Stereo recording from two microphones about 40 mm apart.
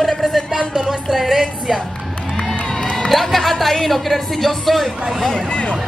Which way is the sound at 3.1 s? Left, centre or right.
Centre.